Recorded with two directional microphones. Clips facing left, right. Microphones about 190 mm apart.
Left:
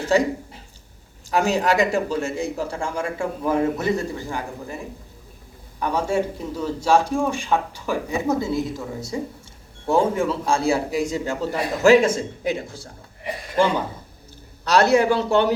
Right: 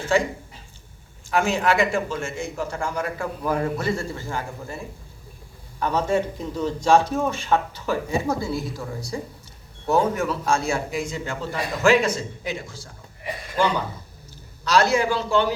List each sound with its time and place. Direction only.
0.1 s a man's voice: 40° left (ahead or behind)
1.3 s a man's voice: 40° left (ahead or behind); by 4.8 s 15° left (ahead or behind)
5.8 s a man's voice: 10° left (ahead or behind)
10.2 s a man's voice: 30° left (ahead or behind); by 12.9 s 55° left (ahead or behind)
14.6 s a man's voice: 60° left (ahead or behind)